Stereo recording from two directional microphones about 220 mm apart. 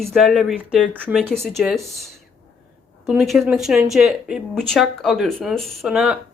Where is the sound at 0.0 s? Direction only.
Centre (ahead or behind).